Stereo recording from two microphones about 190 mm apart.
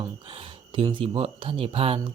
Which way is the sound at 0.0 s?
25° right (ahead or behind).